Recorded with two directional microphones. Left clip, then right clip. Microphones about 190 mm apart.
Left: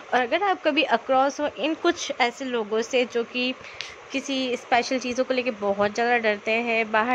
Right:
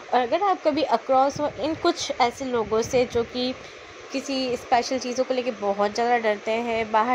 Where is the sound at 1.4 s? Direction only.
20° left (ahead or behind).